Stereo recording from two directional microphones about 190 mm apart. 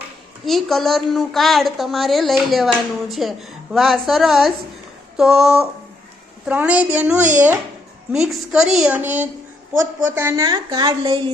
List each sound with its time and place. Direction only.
0.4 s a woman's voice: centre (ahead or behind); by 11.3 s 25° right (ahead or behind)